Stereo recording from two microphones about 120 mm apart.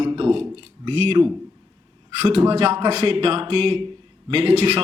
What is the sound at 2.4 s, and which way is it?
A man's voice, 55° right (ahead or behind).